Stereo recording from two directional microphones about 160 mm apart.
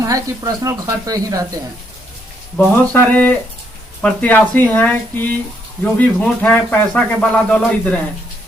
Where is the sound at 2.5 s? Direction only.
10° left (ahead or behind).